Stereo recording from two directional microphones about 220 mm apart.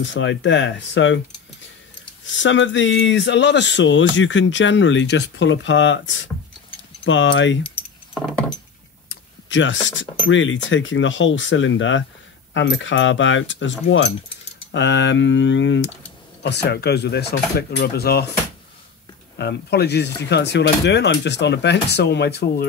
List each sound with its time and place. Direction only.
0.0 s speech: 55° left (ahead or behind)
2.2 s speech: 55° left (ahead or behind)
9.1 s a sound: 60° left (ahead or behind)
10.2 s speech: 60° left (ahead or behind)
19.3 s speech: 50° left (ahead or behind)